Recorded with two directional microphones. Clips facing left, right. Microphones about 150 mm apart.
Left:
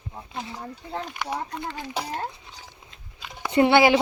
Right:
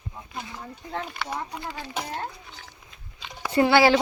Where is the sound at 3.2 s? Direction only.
5° left (ahead or behind).